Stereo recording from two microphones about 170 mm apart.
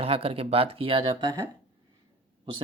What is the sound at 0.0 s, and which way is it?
Speech, 35° right (ahead or behind).